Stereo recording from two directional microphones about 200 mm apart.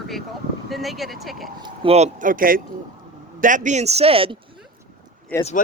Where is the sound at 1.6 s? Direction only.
25° right (ahead or behind).